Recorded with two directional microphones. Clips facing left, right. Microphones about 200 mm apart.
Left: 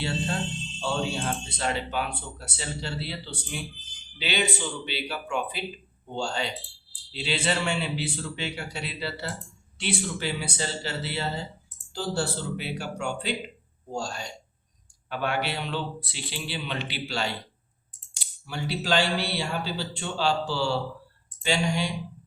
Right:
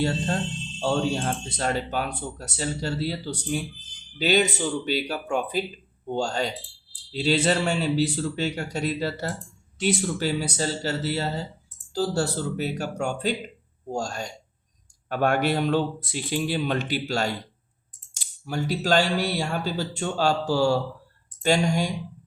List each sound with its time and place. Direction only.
0.0 s speech: 45° right (ahead or behind)